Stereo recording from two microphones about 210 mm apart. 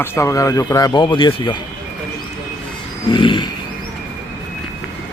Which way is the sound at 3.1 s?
20° left (ahead or behind).